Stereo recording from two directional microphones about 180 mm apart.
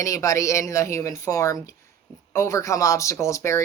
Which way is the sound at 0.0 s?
15° left (ahead or behind).